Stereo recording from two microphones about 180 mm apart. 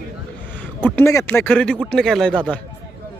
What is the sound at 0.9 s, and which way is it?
Speech, 15° left (ahead or behind).